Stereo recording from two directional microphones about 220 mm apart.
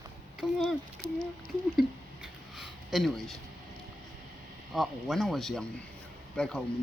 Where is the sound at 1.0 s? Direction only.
45° right (ahead or behind).